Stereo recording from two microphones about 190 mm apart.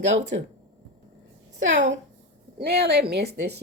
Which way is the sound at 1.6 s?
75° right (ahead or behind).